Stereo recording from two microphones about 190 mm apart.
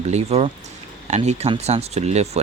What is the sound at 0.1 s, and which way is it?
Speech, 35° right (ahead or behind).